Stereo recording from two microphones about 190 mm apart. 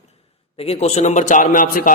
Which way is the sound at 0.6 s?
35° left (ahead or behind).